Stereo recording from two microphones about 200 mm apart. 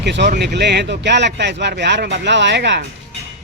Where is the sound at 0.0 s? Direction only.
60° right (ahead or behind).